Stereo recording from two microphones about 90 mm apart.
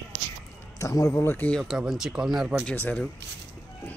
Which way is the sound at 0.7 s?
35° left (ahead or behind).